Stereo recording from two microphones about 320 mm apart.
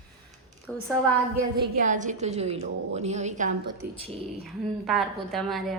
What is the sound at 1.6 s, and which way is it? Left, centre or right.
A woman's voice, right.